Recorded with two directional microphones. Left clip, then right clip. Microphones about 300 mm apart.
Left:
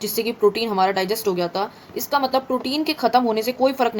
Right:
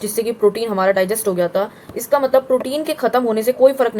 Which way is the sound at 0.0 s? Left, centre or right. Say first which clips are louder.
Right 3 dB; centre.